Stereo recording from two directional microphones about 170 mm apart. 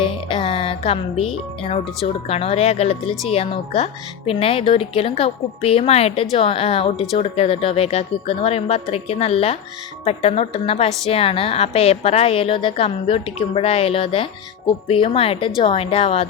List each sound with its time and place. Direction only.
0.0 s a woman's voice: 30° left (ahead or behind)